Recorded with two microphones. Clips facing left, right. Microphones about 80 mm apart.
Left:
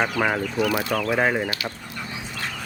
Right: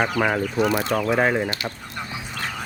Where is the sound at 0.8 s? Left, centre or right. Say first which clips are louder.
Right 2 dB; right.